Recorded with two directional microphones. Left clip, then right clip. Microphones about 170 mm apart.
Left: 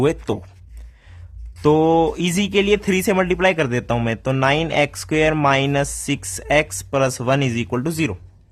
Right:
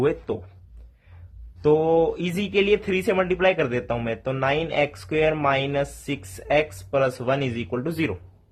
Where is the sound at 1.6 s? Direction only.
35° left (ahead or behind).